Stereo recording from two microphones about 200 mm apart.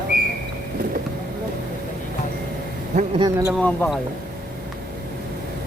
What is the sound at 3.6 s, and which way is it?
Speech, 5° left (ahead or behind).